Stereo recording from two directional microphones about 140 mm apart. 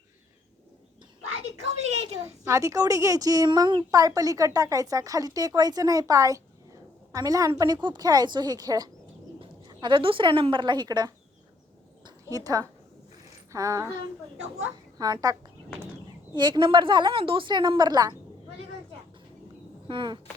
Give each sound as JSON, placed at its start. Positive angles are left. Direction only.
{"t": 2.2, "sound": "a woman's voice", "side_deg": -20}
{"t": 12.0, "sound": "a sound", "side_deg": -30}
{"t": 13.5, "sound": "a woman's voice", "side_deg": -20}
{"t": 19.9, "sound": "a woman's voice", "side_deg": -35}